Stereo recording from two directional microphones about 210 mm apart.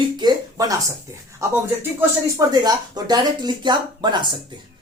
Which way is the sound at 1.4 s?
10° right (ahead or behind).